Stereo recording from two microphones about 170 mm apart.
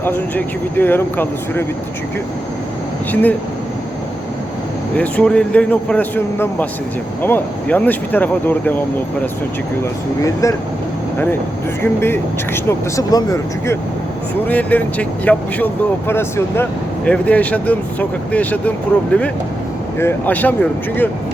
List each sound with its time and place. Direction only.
0.0 s speech: 10° left (ahead or behind)
3.1 s speech: 10° left (ahead or behind)
4.9 s speech: 5° left (ahead or behind)
10.2 s speech: 20° left (ahead or behind)
11.8 s speech: 15° left (ahead or behind)
14.4 s speech: 10° left (ahead or behind)